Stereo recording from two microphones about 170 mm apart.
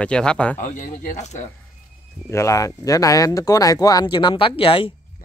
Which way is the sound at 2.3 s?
20° left (ahead or behind).